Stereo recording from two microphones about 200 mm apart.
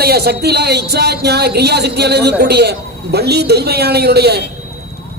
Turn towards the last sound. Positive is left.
turn(degrees=-55)  # may be behind; listen again after turning